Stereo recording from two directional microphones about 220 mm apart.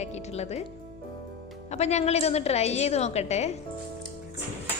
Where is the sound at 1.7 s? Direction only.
30° left (ahead or behind).